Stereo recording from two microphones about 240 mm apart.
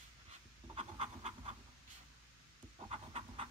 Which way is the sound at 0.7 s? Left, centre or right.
Right.